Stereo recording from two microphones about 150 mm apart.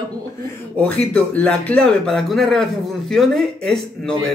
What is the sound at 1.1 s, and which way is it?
Speech, 10° left (ahead or behind).